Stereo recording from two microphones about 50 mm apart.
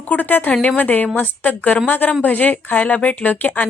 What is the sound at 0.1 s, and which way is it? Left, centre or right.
A woman's voice, left.